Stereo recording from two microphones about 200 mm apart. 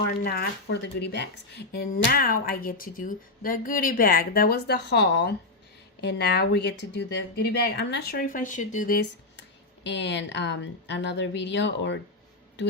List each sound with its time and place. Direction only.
0.3 s a woman's voice: 55° left (ahead or behind)
9.8 s speech: 60° left (ahead or behind)